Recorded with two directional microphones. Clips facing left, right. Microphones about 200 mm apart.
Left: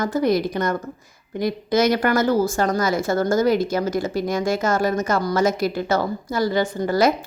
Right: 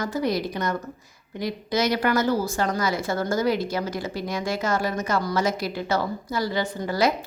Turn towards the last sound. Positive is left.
turn(degrees=50)  # may be behind; listen again after turning